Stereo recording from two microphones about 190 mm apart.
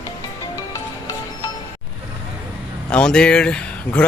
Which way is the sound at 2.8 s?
5° left (ahead or behind).